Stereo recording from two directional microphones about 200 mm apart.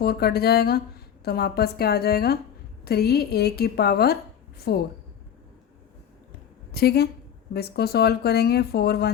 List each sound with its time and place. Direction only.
0.0 s speech: 50° left (ahead or behind)
6.7 s a woman's voice: 50° left (ahead or behind)